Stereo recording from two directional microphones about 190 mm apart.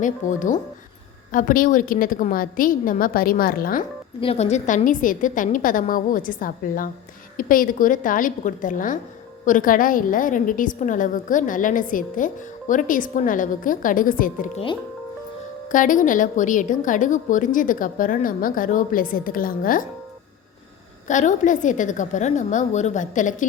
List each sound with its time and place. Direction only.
0.0 s a woman's voice: 40° left (ahead or behind)
4.2 s a woman's voice: 35° left (ahead or behind)
15.7 s a woman's voice: 45° left (ahead or behind)
21.1 s a woman's voice: 40° left (ahead or behind)